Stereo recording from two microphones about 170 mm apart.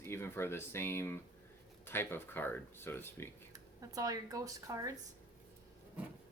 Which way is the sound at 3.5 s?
20° right (ahead or behind).